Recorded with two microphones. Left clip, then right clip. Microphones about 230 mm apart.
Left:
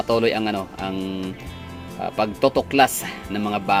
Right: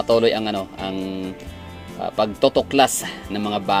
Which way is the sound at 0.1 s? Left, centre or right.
Centre.